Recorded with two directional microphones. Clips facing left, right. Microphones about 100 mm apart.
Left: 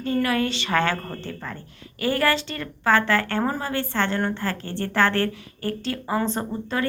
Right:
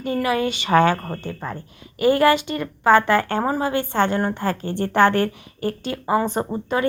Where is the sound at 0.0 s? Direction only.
15° right (ahead or behind).